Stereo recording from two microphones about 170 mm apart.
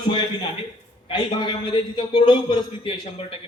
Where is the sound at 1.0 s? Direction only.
30° left (ahead or behind).